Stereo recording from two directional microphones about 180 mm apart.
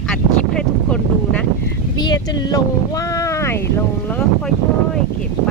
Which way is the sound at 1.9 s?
25° left (ahead or behind).